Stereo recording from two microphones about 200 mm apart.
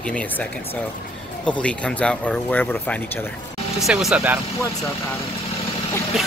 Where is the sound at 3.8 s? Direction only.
Centre (ahead or behind).